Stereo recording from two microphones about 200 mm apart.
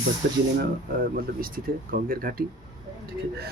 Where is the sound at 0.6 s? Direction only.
45° right (ahead or behind).